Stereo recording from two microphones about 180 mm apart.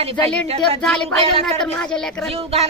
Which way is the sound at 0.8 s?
5° left (ahead or behind).